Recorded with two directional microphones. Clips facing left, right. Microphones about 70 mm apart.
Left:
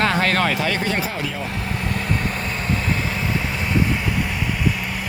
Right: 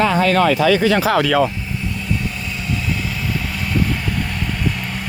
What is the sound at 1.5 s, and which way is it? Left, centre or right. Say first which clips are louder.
Vehicle: left 1 dB; left.